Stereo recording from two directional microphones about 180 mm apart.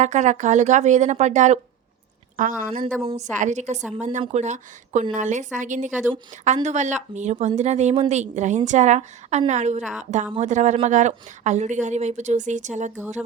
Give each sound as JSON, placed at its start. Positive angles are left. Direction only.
{"t": 0.0, "sound": "a woman's voice", "side_deg": -40}
{"t": 3.3, "sound": "a woman's voice", "side_deg": -40}